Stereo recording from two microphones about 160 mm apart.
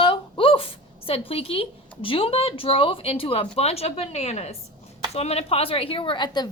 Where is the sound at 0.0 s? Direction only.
35° left (ahead or behind).